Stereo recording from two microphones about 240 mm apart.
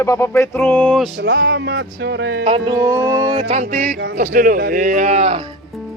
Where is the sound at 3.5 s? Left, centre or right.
Right.